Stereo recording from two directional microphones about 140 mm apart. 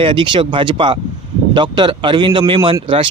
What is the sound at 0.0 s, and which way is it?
Speech, 35° right (ahead or behind).